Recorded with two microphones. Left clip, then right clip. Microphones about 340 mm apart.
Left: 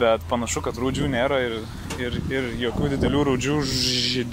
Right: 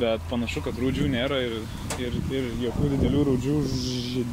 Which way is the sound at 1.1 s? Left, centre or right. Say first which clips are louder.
Left 4 dB; left.